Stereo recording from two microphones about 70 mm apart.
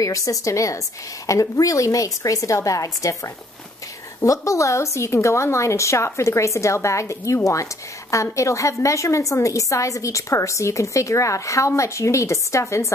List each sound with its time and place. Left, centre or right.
0.0 s a woman's voice: left
4.2 s a woman's voice: left